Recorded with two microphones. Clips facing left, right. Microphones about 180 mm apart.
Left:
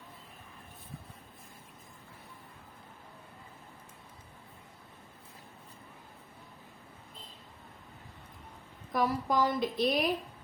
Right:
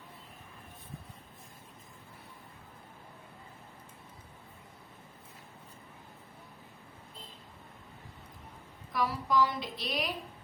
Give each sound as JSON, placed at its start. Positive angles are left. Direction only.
{"t": 8.9, "sound": "speech", "side_deg": 50}